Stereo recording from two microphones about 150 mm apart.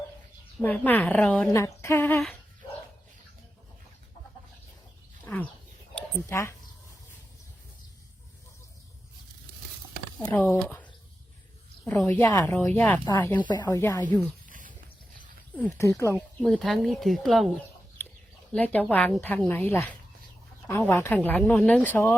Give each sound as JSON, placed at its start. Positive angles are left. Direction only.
{"t": 0.6, "sound": "speech", "side_deg": 10}
{"t": 1.8, "sound": "a sound", "side_deg": 15}
{"t": 5.2, "sound": "a sound", "side_deg": 10}
{"t": 6.1, "sound": "speech", "side_deg": 20}
{"t": 10.2, "sound": "speech", "side_deg": 10}
{"t": 11.9, "sound": "speech", "side_deg": 5}
{"t": 12.3, "sound": "speech", "side_deg": 20}
{"t": 12.7, "sound": "speech", "side_deg": 10}
{"t": 14.4, "sound": "a sound", "side_deg": -60}
{"t": 15.8, "sound": "speech", "side_deg": 20}
{"t": 16.5, "sound": "speech", "side_deg": 0}